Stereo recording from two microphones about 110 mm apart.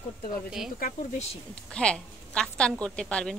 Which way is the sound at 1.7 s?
10° left (ahead or behind).